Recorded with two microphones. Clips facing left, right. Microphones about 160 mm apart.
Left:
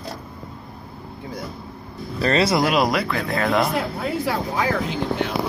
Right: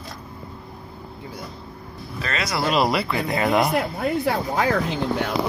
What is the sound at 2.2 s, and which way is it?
Speech, 30° left (ahead or behind).